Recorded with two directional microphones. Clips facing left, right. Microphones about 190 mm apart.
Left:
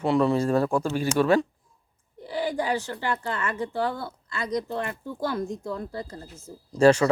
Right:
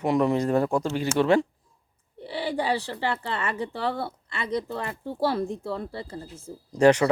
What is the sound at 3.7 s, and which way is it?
Speech, 75° right (ahead or behind).